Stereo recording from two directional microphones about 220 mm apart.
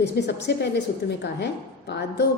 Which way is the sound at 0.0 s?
50° left (ahead or behind).